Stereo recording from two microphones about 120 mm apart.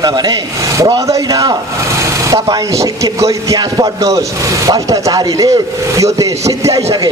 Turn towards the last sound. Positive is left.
turn(degrees=-30)  # may be behind; listen again after turning